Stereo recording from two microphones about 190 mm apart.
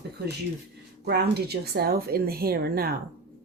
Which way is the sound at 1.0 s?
60° right (ahead or behind).